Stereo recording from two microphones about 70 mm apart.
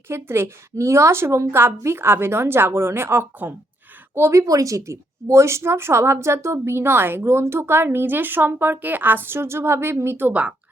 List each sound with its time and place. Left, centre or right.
0.1 s speech: right
4.1 s speech: right